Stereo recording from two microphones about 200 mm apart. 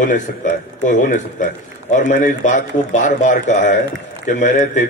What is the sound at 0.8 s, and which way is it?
A man's voice, 40° left (ahead or behind).